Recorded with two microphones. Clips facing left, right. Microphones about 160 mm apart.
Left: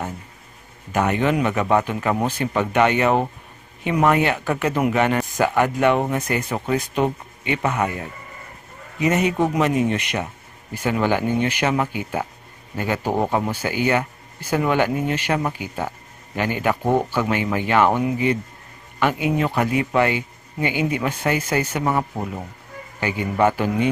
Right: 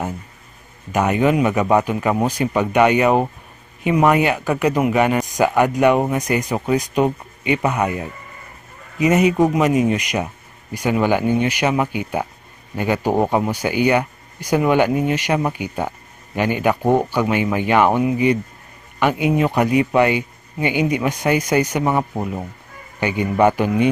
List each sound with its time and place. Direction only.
0.9 s speech: 15° right (ahead or behind)
9.4 s speech: 10° right (ahead or behind)